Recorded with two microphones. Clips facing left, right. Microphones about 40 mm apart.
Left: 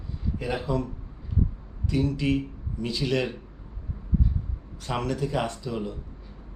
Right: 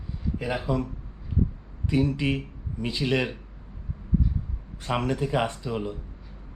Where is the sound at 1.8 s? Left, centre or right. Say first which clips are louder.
Right 1 dB; right.